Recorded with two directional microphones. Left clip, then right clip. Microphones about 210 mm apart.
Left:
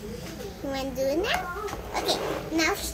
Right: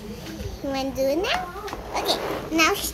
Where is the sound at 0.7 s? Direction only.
20° right (ahead or behind).